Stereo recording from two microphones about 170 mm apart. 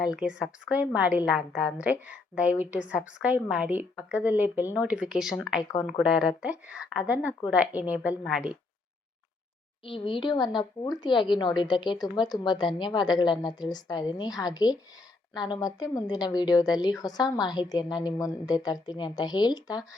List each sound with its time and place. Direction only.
0.1 s a woman's voice: 5° right (ahead or behind)
9.8 s speech: 30° left (ahead or behind)